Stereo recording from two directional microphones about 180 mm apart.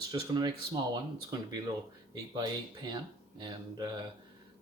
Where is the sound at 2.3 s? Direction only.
25° right (ahead or behind).